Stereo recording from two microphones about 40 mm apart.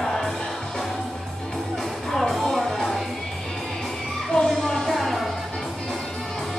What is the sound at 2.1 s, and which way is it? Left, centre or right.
Music, centre.